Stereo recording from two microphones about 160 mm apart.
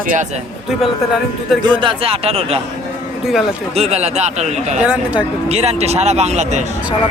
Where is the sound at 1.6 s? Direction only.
30° right (ahead or behind).